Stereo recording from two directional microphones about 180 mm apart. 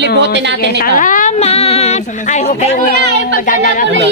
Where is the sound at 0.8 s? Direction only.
50° left (ahead or behind).